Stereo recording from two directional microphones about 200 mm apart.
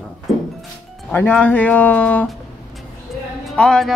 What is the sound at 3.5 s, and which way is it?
Speech, 5° left (ahead or behind).